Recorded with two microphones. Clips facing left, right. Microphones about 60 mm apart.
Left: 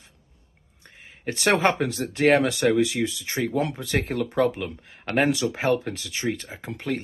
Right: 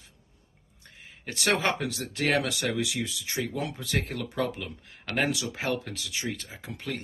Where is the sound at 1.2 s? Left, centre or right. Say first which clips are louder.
Left 6 dB; left.